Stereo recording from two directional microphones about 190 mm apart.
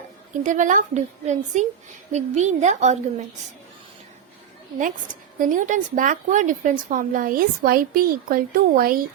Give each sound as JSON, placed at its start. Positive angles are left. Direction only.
{"t": 0.4, "sound": "a woman's voice", "side_deg": -40}
{"t": 4.8, "sound": "a woman's voice", "side_deg": -45}